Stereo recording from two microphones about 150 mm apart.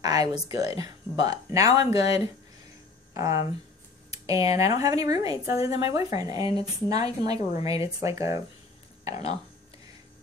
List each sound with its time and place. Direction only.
0.0 s speech: 25° right (ahead or behind)
3.2 s speech: 20° right (ahead or behind)